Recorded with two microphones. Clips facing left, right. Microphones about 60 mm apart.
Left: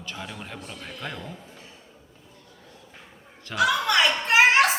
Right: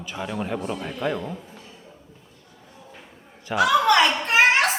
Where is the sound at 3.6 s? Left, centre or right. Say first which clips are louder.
Right 4 dB; centre.